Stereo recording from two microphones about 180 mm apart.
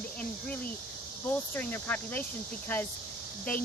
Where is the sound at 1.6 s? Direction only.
10° left (ahead or behind).